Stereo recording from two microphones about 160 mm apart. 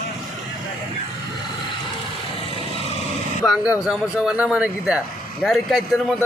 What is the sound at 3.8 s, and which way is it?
A man's voice, 5° right (ahead or behind).